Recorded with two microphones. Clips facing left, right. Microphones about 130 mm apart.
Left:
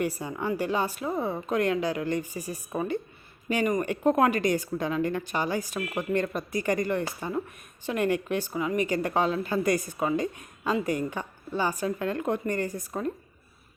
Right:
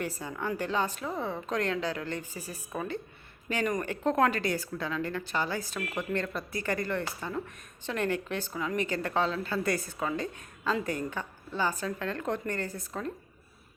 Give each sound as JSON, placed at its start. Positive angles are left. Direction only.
{"t": 0.0, "sound": "speech", "side_deg": 15}